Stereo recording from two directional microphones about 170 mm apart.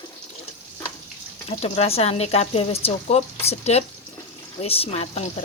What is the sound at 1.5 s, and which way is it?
Speech, 35° left (ahead or behind).